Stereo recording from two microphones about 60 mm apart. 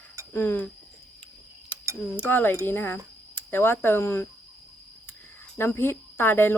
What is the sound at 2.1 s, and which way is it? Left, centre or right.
Speech, left.